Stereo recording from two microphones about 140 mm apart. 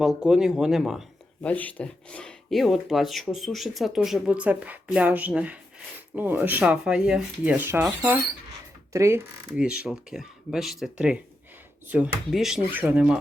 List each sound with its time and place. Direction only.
0.0 s speech: 5° right (ahead or behind)
1.4 s speech: 10° left (ahead or behind); by 9.2 s 20° right (ahead or behind)
9.6 s speech: 5° right (ahead or behind)